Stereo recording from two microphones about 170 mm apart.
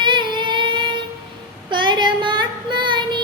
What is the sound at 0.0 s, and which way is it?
Singing, 25° right (ahead or behind).